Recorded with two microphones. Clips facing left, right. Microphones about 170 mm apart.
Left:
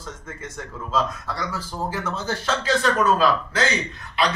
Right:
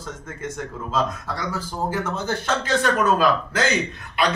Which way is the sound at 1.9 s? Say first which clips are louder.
Right 2 dB; 55° right (ahead or behind).